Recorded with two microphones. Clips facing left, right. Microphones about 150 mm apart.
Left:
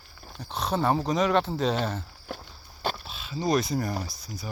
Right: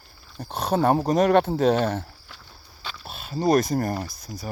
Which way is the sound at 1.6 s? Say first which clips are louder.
Right 6 dB; 60° right (ahead or behind).